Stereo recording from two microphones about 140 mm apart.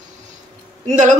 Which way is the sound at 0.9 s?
60° right (ahead or behind).